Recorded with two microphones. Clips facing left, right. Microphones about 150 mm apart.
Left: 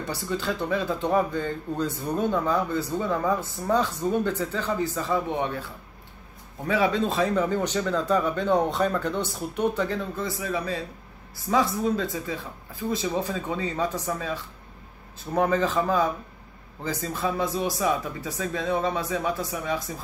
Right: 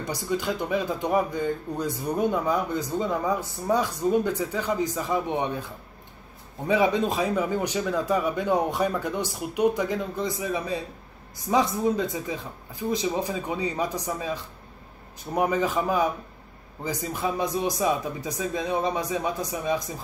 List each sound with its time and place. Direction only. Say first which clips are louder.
0.0 s speech: right 1 dB; 15° right (ahead or behind)
6.7 s speech: right 1 dB; 20° right (ahead or behind)